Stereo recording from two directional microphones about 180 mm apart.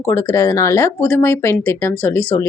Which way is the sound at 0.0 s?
15° left (ahead or behind).